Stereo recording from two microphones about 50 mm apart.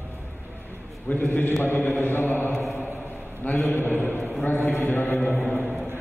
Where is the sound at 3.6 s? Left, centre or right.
Left.